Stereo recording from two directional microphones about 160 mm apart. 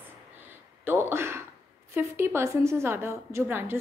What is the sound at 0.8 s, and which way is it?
A woman's voice, 15° right (ahead or behind).